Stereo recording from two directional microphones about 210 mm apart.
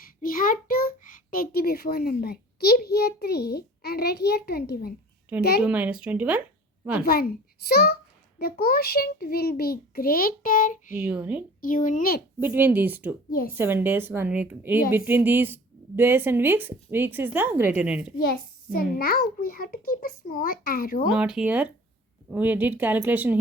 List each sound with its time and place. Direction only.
0.2 s a child's voice: 45° left (ahead or behind)
5.6 s speech: 5° right (ahead or behind)
7.0 s a child's voice: 45° left (ahead or behind)
10.9 s speech: 5° right (ahead or behind)
11.6 s speech: 40° left (ahead or behind)
12.4 s speech: 10° right (ahead or behind)
18.2 s a child's voice: 45° left (ahead or behind)
21.1 s speech: 5° right (ahead or behind)